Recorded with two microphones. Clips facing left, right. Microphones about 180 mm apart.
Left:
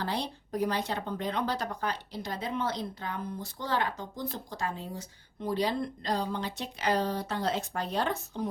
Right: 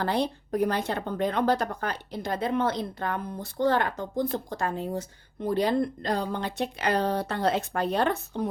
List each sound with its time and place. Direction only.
0.0 s speech: 55° right (ahead or behind)